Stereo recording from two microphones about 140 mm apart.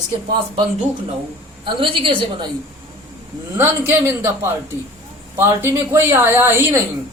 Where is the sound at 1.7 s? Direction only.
40° right (ahead or behind).